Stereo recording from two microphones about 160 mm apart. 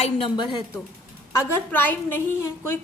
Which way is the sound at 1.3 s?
10° left (ahead or behind).